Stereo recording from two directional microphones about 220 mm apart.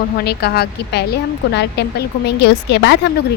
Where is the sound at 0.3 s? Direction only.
45° left (ahead or behind).